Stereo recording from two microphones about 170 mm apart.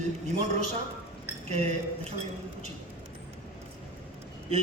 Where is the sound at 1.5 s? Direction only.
40° right (ahead or behind).